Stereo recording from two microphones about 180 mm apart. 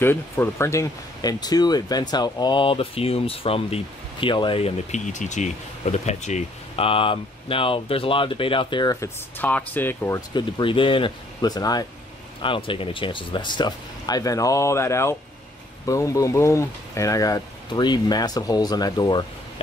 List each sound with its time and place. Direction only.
0.0 s speech: 10° left (ahead or behind)
9.4 s speech: 10° left (ahead or behind)
10.6 s speech: 30° left (ahead or behind)